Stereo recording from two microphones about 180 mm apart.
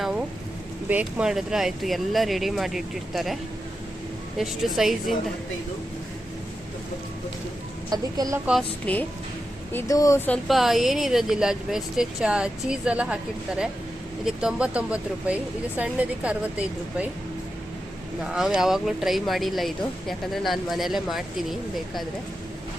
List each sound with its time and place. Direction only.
0.0 s a sound: 5° right (ahead or behind)
0.9 s speech: 10° right (ahead or behind)
4.4 s speech: centre (ahead or behind)
7.9 s a woman's voice: 20° right (ahead or behind)
8.9 s speech: 5° left (ahead or behind)
9.7 s speech: 20° left (ahead or behind); by 13.1 s 5° right (ahead or behind)
14.3 s a woman's voice: 5° right (ahead or behind)
18.2 s speech: centre (ahead or behind)